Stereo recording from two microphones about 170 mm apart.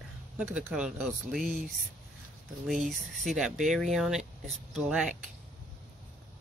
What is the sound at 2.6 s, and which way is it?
Speech, centre (ahead or behind).